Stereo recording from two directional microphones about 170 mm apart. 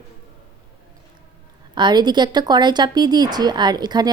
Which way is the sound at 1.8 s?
25° right (ahead or behind).